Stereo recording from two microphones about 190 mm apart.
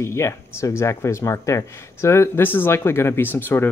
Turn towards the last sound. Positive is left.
turn(degrees=10)  # may be behind; listen again after turning